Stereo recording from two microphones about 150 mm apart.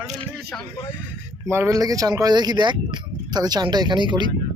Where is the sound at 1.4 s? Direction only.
20° right (ahead or behind).